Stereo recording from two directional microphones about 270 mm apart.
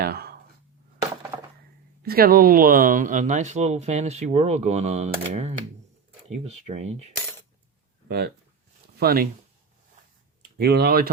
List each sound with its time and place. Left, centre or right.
0.0 s speech: right
1.3 s a sound: centre
2.0 s speech: right
8.0 s speech: right
10.4 s speech: right